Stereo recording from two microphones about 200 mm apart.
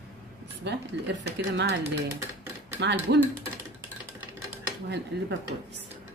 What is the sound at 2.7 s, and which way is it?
Speech, 60° right (ahead or behind).